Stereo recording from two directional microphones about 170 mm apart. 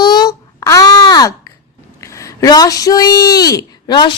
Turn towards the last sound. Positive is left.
turn(degrees=25)  # may be behind; listen again after turning